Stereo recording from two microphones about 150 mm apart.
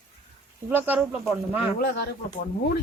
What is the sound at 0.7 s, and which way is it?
Speech, 10° right (ahead or behind).